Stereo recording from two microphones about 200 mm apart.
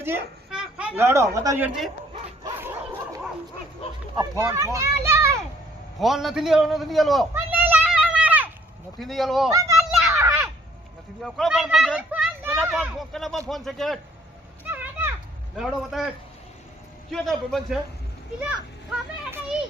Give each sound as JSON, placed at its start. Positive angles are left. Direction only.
{"t": 0.0, "sound": "speech", "side_deg": -5}
{"t": 2.4, "sound": "bow-wow", "side_deg": -15}
{"t": 4.2, "sound": "a child's voice", "side_deg": -15}
{"t": 6.0, "sound": "a man's voice", "side_deg": 0}
{"t": 7.3, "sound": "children playing", "side_deg": -10}
{"t": 9.0, "sound": "a man's voice", "side_deg": 0}
{"t": 9.5, "sound": "a child's voice", "side_deg": -15}
{"t": 10.1, "sound": "a sound", "side_deg": -15}
{"t": 11.2, "sound": "a child's voice", "side_deg": 0}
{"t": 14.6, "sound": "children playing", "side_deg": -10}
{"t": 15.5, "sound": "a man's voice", "side_deg": 0}
{"t": 17.1, "sound": "a man's voice", "side_deg": 0}
{"t": 18.9, "sound": "a man's voice", "side_deg": -5}